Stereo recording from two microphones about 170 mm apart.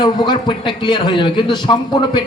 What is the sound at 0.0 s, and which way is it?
A man's voice, 30° left (ahead or behind).